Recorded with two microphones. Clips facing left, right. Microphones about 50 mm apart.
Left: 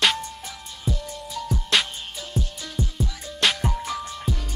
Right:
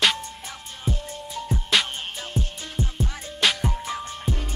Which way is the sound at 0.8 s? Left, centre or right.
Right.